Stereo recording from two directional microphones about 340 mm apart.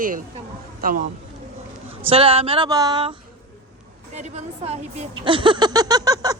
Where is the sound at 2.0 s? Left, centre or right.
Centre.